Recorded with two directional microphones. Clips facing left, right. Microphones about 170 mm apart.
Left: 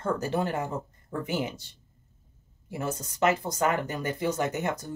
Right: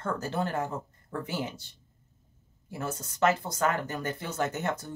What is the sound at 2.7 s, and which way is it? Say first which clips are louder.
Speech: left 3 dB; 15° left (ahead or behind).